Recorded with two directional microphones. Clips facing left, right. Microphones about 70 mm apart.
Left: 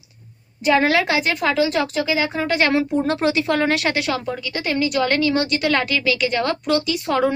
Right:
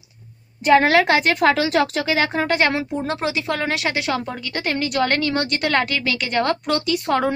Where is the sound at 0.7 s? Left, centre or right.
Right.